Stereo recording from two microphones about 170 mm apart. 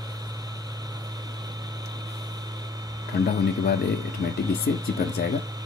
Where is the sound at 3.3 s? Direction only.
20° right (ahead or behind).